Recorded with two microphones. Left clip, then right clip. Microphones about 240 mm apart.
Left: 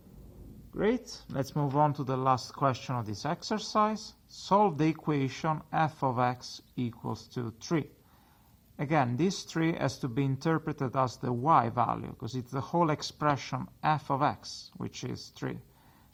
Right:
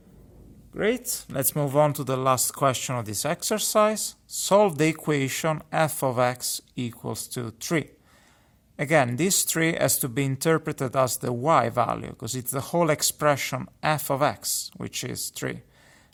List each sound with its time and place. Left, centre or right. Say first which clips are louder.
0.7 s speech: right 5 dB; right